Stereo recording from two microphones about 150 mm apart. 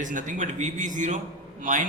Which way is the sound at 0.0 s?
60° right (ahead or behind).